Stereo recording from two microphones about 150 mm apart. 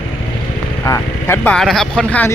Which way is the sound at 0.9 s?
20° left (ahead or behind).